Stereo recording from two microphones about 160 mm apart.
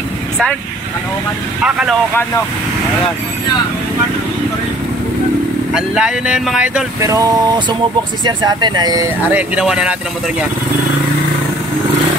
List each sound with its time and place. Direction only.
1.6 s speech: 5° right (ahead or behind)
5.7 s speech: 5° right (ahead or behind)
7.0 s speech: 20° right (ahead or behind)
9.3 s speech: 5° right (ahead or behind)